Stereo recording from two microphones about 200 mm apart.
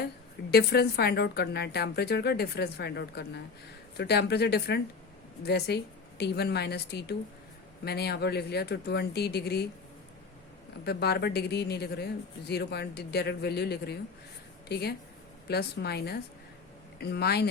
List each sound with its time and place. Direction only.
0.5 s a woman's voice: 55° left (ahead or behind)
10.8 s a woman's voice: 55° left (ahead or behind)